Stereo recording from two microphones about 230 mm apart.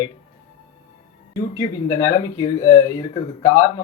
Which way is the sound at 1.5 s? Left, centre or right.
Centre.